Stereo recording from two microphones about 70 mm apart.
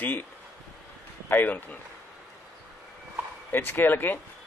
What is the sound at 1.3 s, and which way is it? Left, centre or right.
Speech, left.